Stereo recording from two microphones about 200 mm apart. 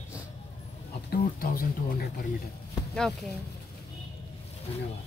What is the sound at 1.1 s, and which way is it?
Speech, 45° left (ahead or behind).